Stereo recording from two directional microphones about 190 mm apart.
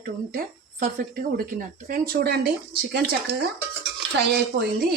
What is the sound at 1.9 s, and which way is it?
Speech, 50° right (ahead or behind).